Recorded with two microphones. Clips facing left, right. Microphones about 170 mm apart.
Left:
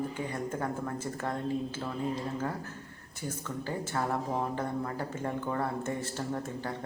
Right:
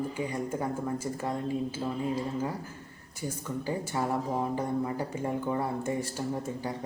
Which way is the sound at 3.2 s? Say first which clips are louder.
Right 3 dB; 10° right (ahead or behind).